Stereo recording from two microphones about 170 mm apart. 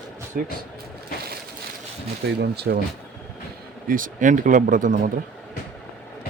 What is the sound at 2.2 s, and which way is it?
Speech, 70° right (ahead or behind).